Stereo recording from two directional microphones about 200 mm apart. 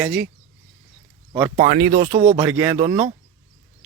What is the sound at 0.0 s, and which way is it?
Speech, 5° right (ahead or behind).